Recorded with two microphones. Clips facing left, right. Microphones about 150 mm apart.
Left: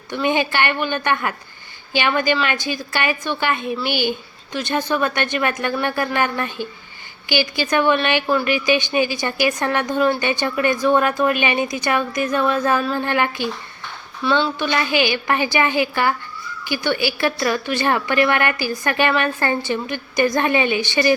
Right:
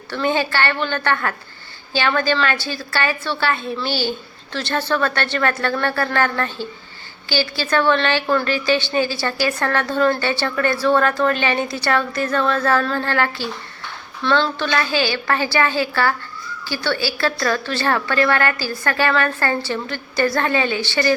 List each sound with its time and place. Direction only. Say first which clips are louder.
0.1 s a woman's voice: even; 15° left (ahead or behind)